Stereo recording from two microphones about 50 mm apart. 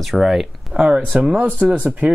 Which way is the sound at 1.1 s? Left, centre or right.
Right.